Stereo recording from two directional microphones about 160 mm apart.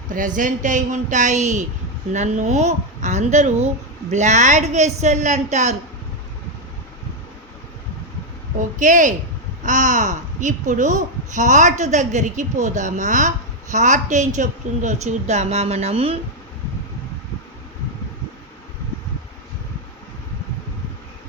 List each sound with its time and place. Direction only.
0.1 s speech: 55° right (ahead or behind)
8.5 s speech: 55° right (ahead or behind)